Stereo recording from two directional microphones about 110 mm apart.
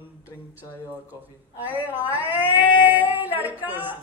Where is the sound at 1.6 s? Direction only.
15° right (ahead or behind).